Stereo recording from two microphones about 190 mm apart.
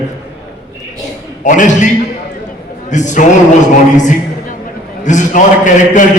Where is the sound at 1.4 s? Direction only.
40° left (ahead or behind).